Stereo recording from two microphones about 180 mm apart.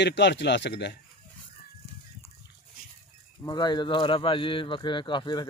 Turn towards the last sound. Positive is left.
turn(degrees=25)  # may be behind; listen again after turning